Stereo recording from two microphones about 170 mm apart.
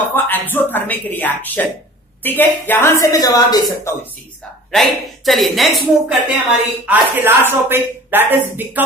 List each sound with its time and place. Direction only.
0.1 s a woman's voice: 10° left (ahead or behind)
4.6 s speech: centre (ahead or behind)
6.9 s speech: 10° right (ahead or behind)